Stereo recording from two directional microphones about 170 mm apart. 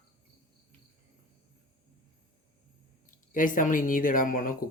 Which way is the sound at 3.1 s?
50° left (ahead or behind).